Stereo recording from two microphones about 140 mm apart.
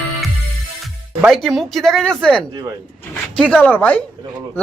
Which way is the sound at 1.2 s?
Centre (ahead or behind).